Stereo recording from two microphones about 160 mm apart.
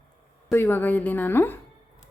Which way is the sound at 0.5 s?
15° left (ahead or behind).